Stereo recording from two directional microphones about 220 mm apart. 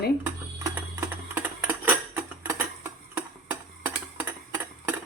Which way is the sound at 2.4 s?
10° right (ahead or behind).